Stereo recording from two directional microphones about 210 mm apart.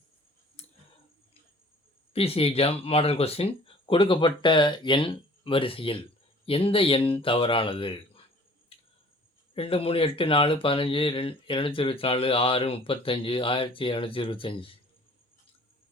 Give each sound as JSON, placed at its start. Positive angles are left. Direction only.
{"t": 0.6, "sound": "tick", "side_deg": 30}
{"t": 2.1, "sound": "speech", "side_deg": 30}
{"t": 9.6, "sound": "speech", "side_deg": 25}